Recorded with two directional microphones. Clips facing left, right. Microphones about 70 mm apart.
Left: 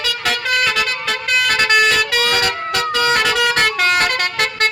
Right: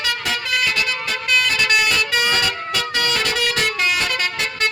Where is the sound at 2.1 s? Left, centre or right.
Left.